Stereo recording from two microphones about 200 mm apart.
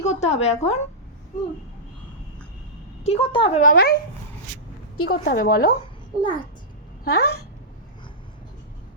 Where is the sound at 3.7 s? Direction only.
50° left (ahead or behind).